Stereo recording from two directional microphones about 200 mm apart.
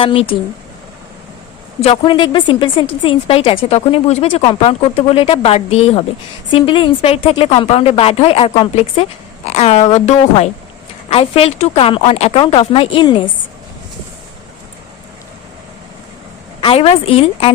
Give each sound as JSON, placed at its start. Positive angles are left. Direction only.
{"t": 0.0, "sound": "speech", "side_deg": 25}
{"t": 1.8, "sound": "a woman's voice", "side_deg": 25}
{"t": 16.6, "sound": "speech", "side_deg": 25}